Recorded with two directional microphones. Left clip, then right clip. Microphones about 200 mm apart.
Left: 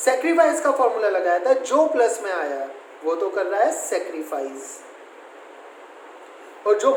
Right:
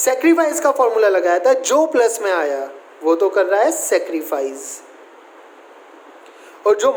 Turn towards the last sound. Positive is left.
turn(degrees=-55)  # may be behind; listen again after turning